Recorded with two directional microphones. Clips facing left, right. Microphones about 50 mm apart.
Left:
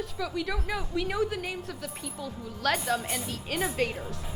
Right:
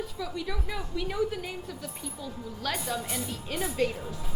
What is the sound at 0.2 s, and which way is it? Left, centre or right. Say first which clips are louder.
A woman's voice: left 5 dB; left.